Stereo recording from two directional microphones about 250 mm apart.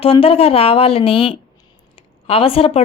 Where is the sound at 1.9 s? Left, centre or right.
Left.